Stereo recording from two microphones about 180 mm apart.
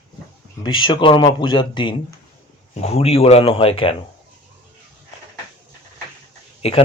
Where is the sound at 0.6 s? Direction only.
25° left (ahead or behind).